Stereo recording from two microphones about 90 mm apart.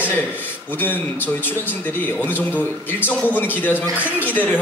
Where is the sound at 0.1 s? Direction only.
20° left (ahead or behind).